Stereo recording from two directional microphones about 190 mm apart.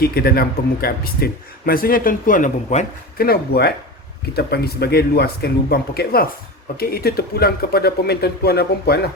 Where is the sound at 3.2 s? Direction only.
55° left (ahead or behind).